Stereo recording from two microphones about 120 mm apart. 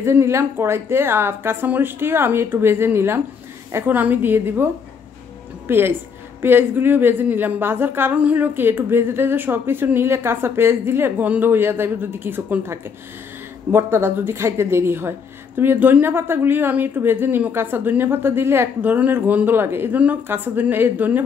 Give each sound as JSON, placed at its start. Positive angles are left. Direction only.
{"t": 0.0, "sound": "speech", "side_deg": -20}
{"t": 5.7, "sound": "speech", "side_deg": -20}